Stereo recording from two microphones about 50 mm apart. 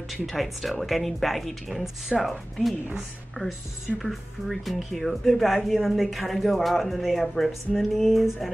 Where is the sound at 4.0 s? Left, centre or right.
Centre.